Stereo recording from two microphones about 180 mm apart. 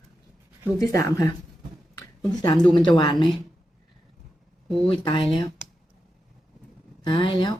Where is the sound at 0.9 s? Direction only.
15° left (ahead or behind).